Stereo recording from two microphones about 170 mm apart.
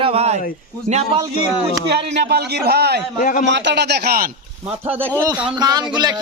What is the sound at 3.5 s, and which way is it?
Speech, 90° right.